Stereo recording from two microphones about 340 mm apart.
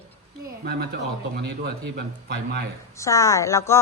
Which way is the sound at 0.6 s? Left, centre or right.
Right.